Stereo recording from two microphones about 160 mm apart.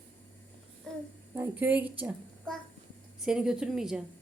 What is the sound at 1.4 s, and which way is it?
Speech, 10° right (ahead or behind).